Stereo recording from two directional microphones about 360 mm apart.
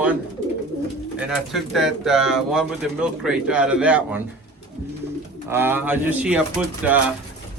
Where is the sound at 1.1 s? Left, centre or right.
Centre.